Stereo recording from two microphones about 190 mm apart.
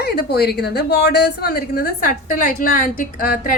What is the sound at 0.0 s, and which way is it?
A woman's voice, 55° left (ahead or behind).